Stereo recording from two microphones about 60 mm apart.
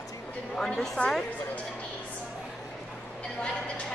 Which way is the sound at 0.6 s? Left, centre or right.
Centre.